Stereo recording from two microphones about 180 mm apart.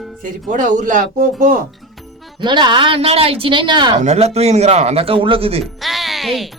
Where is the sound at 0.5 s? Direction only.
45° right (ahead or behind).